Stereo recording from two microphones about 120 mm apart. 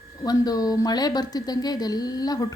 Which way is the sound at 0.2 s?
30° left (ahead or behind).